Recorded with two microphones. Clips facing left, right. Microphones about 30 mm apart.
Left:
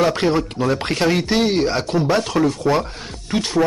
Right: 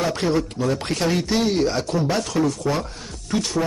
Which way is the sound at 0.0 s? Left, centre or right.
Left.